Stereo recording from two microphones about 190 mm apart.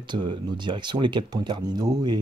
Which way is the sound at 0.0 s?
25° right (ahead or behind).